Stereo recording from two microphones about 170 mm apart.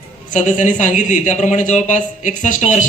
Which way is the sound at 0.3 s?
45° left (ahead or behind).